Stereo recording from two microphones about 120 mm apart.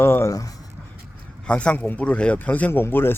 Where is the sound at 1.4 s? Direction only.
10° left (ahead or behind).